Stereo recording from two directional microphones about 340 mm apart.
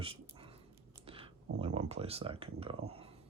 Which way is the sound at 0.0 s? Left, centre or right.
Centre.